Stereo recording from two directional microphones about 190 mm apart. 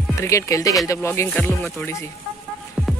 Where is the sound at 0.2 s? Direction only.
15° left (ahead or behind).